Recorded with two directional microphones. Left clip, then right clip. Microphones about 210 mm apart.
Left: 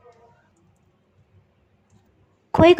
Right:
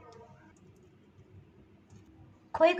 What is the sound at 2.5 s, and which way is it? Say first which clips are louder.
Speech: left 11 dB; 45° left (ahead or behind).